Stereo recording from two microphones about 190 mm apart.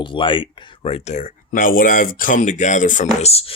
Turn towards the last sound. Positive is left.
turn(degrees=35)  # may be behind; listen again after turning